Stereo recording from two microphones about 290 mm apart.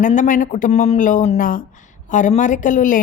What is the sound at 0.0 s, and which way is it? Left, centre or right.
Speech, left.